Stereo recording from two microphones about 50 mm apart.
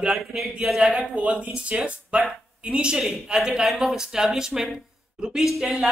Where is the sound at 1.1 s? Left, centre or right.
Right.